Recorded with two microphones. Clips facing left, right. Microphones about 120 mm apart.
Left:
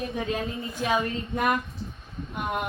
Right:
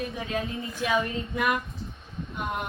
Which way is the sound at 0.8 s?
40° left (ahead or behind).